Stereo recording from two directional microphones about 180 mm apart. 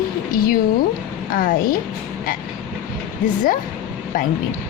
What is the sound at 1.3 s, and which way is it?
Speech, 50° left (ahead or behind).